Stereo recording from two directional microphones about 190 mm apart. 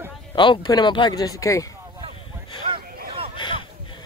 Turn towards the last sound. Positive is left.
turn(degrees=25)  # may be behind; listen again after turning